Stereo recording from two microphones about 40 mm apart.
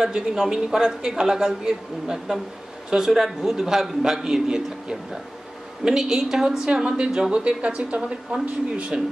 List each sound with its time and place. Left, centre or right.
0.0 s a woman's voice: centre; by 9.0 s right